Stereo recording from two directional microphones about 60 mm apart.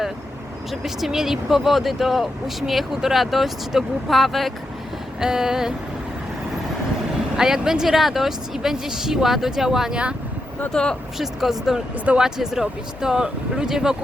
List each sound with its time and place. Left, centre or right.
0.7 s speech: centre
5.2 s speech: centre
7.3 s speech: centre
10.7 s speech: centre
11.2 s speech: centre